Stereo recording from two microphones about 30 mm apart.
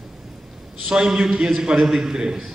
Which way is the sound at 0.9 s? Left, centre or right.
Right.